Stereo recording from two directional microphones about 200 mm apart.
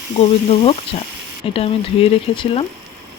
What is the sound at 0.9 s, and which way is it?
Speech, 30° left (ahead or behind).